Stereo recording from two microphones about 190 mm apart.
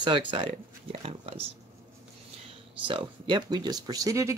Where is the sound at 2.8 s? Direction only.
25° right (ahead or behind).